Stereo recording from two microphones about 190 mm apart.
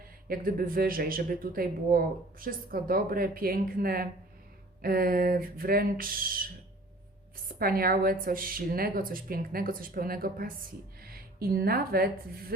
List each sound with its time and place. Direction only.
0.3 s speech: 50° right (ahead or behind)